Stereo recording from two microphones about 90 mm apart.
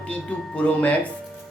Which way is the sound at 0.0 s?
15° left (ahead or behind).